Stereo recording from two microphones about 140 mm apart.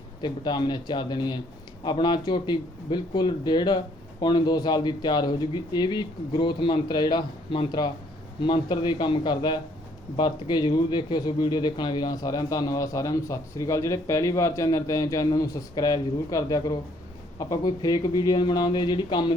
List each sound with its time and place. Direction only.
0.2 s speech: 30° left (ahead or behind)